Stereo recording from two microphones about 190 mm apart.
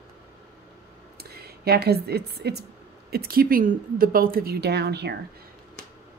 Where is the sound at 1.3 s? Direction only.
55° right (ahead or behind).